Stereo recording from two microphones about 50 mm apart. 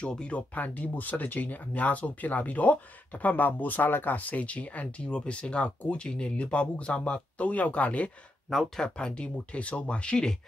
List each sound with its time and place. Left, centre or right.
0.0 s speech: left
8.7 s speech: centre